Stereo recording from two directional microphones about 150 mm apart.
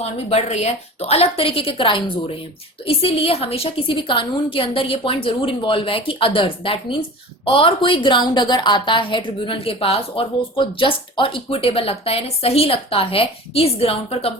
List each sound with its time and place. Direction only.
0.0 s a woman's voice: 45° left (ahead or behind)